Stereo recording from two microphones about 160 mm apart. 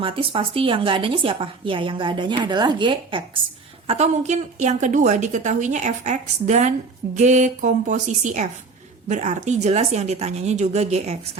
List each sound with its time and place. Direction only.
0.0 s a woman's voice: 35° right (ahead or behind)
3.8 s a woman's voice: 45° right (ahead or behind)